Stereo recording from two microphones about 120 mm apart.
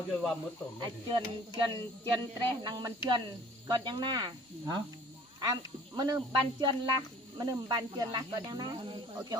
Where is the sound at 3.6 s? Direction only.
40° right (ahead or behind).